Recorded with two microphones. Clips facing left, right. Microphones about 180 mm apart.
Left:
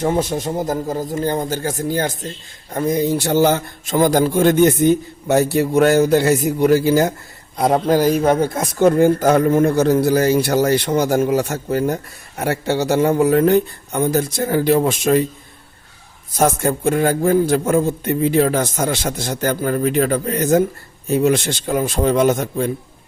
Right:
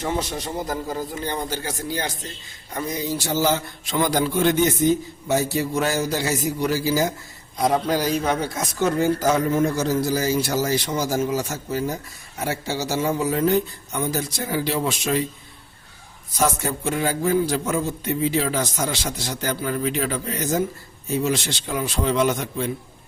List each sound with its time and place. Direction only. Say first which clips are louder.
0.0 s a man's voice: left 7 dB; 50° left (ahead or behind)
16.3 s a man's voice: left 6 dB; 50° left (ahead or behind)